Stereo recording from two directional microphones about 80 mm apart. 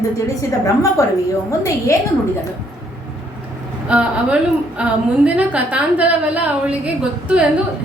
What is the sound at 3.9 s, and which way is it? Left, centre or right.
A woman's voice, centre.